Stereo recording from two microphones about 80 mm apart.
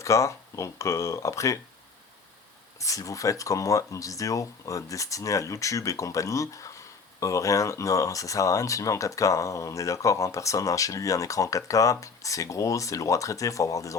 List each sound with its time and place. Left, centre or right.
0.0 s speech: left
2.7 s speech: left